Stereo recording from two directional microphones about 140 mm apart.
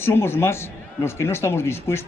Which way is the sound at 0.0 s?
15° left (ahead or behind).